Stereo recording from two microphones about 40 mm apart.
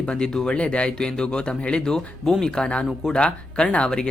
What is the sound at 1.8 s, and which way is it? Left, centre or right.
Speech, centre.